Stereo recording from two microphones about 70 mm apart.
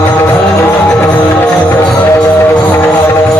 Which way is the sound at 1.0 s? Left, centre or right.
Left.